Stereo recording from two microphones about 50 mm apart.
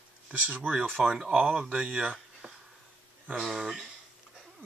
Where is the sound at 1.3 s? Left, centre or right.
Right.